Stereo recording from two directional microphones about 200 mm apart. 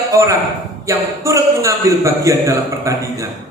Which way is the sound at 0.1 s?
15° right (ahead or behind).